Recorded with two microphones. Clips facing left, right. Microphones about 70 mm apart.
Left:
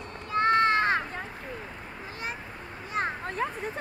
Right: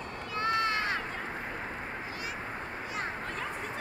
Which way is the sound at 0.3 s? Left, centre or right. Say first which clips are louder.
Left 7 dB; left.